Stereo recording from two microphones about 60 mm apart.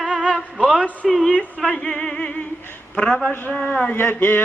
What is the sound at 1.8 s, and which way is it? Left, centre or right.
Music, centre.